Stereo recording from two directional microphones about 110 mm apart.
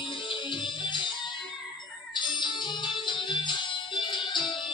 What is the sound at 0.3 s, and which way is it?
Music, 45° left (ahead or behind).